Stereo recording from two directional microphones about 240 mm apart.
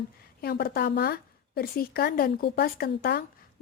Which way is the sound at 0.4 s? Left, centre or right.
Left.